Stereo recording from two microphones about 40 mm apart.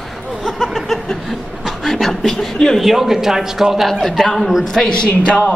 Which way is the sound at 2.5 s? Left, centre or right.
Centre.